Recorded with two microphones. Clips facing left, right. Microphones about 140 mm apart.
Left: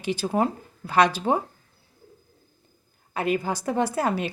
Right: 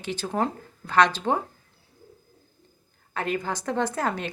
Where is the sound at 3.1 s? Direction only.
10° left (ahead or behind).